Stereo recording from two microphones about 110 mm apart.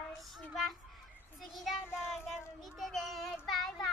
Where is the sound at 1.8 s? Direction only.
20° left (ahead or behind).